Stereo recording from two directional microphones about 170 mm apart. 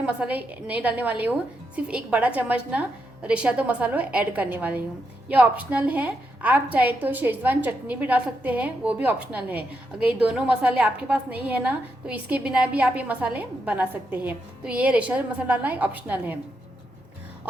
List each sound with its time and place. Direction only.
0.0 s a woman's voice: 10° right (ahead or behind)